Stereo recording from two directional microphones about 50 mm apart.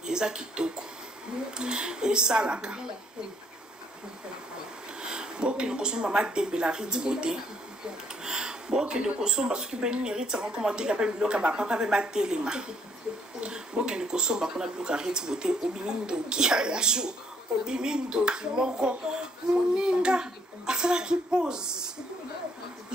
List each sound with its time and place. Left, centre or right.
0.1 s speech: centre
5.0 s speech: centre